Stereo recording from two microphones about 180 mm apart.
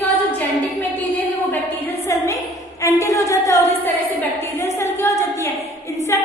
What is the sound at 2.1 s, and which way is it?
A woman's voice, 15° left (ahead or behind).